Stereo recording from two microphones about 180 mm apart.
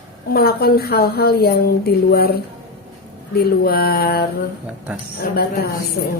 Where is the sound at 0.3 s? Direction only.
60° left (ahead or behind).